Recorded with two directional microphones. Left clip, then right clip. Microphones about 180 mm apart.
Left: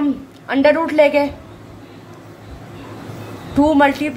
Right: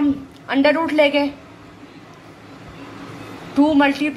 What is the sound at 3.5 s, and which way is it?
Speech, 15° left (ahead or behind).